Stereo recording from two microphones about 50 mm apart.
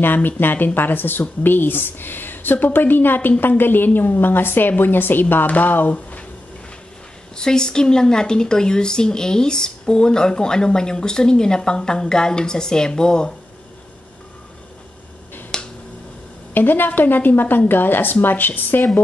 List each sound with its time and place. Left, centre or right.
0.0 s a woman's voice: left
7.3 s speech: centre
15.5 s finger snapping: centre
16.5 s a woman's voice: left